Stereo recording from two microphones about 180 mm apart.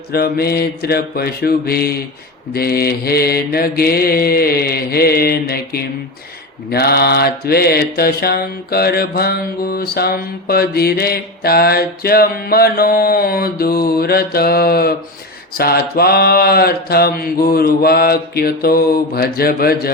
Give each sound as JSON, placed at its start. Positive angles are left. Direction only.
{"t": 0.1, "sound": "mantra", "side_deg": 60}